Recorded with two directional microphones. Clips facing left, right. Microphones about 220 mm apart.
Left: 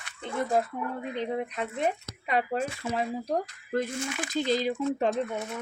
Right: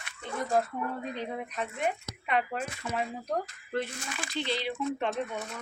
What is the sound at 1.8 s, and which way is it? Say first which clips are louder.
Speech: left 1 dB; 35° left (ahead or behind).